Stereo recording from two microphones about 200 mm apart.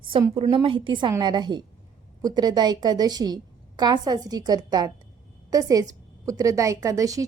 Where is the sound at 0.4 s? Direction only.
25° right (ahead or behind).